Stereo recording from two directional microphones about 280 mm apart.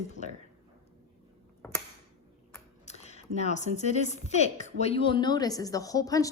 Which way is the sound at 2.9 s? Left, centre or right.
Left.